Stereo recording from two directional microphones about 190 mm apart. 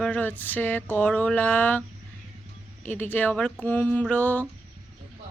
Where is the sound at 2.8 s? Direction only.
10° left (ahead or behind).